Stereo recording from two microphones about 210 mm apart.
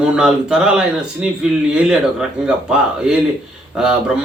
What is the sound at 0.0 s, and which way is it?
Speech, 5° right (ahead or behind).